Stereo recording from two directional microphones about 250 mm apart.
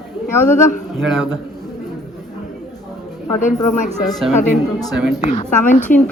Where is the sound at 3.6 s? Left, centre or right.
Left.